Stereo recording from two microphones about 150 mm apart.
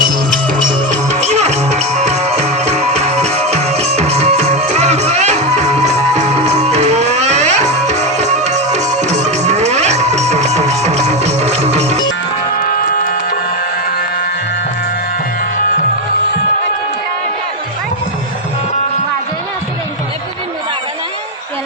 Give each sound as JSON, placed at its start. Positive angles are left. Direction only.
{"t": 0.9, "sound": "music", "side_deg": -50}